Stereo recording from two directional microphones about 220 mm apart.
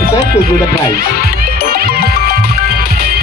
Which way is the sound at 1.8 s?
45° right (ahead or behind).